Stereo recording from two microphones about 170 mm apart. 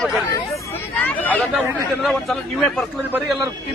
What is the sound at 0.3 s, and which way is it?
Chatter, 20° left (ahead or behind).